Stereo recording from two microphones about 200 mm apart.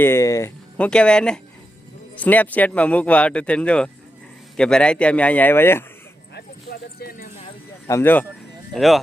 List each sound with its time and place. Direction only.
0.0 s speech: 15° left (ahead or behind)
7.0 s speech: 45° left (ahead or behind)
7.9 s speech: 10° left (ahead or behind)